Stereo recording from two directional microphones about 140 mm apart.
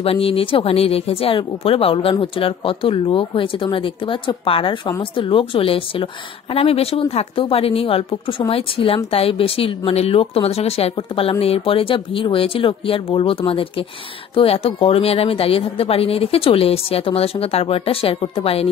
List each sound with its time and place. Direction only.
0.0 s speech: 40° left (ahead or behind)